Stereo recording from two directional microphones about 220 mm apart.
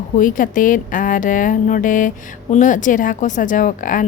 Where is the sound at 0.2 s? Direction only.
35° left (ahead or behind).